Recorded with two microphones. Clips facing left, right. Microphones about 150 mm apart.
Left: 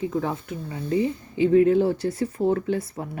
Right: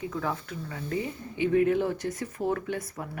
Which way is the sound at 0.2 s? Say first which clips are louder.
Left 4 dB; 25° left (ahead or behind).